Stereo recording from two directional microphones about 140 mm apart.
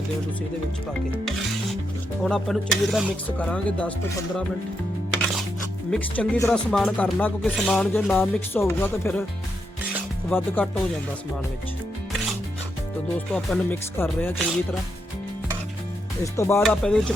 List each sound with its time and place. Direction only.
2.2 s a sound: centre (ahead or behind)
3.2 s speech: 10° left (ahead or behind)
5.9 s speech: 10° left (ahead or behind)
7.4 s a sound: centre (ahead or behind)
8.5 s speech: 15° left (ahead or behind)
10.3 s speech: 15° left (ahead or behind)
13.1 s speech: 10° left (ahead or behind)
16.2 s speech: 20° left (ahead or behind)
16.6 s a sound: 5° left (ahead or behind)